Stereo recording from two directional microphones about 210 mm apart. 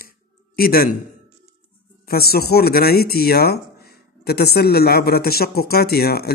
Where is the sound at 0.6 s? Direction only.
45° left (ahead or behind).